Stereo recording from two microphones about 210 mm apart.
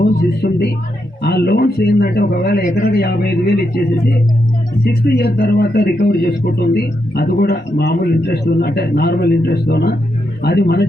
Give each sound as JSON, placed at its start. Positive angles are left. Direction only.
{"t": 0.4, "sound": "a man's voice", "side_deg": 50}